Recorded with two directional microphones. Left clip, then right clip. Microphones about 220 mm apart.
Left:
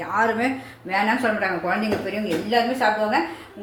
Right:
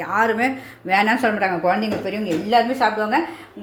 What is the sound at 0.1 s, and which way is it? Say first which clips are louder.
A woman's voice: right 2 dB; 40° right (ahead or behind).